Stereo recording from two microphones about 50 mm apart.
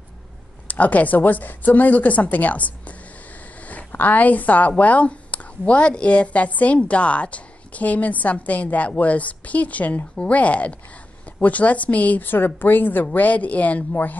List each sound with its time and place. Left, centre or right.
0.7 s speech: left